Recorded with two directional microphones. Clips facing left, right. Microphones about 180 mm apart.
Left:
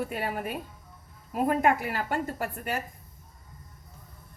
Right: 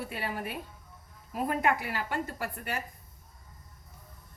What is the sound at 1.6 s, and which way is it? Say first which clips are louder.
Speech: left 4 dB; 45° left (ahead or behind).